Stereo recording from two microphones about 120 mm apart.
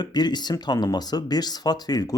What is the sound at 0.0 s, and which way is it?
Speech, 35° left (ahead or behind).